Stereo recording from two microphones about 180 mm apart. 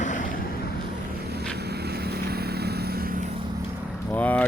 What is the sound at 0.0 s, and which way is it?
Vehicle, 45° left (ahead or behind).